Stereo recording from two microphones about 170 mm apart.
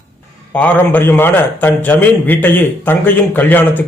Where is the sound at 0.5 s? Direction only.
10° left (ahead or behind).